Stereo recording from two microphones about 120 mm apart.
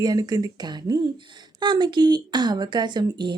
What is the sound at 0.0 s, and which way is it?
A woman's voice, 35° right (ahead or behind).